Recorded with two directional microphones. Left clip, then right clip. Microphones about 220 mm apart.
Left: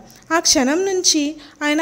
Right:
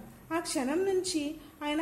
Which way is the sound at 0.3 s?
50° left (ahead or behind).